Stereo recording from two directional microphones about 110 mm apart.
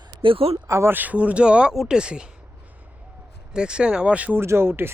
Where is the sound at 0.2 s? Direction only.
55° right (ahead or behind).